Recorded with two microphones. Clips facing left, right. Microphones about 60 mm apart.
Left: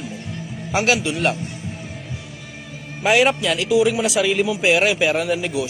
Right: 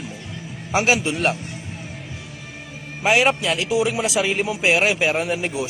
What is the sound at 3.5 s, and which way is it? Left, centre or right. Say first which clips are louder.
Speech: left 3 dB; right.